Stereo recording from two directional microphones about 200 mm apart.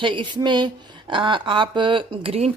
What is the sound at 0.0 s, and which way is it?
Speech, 25° right (ahead or behind).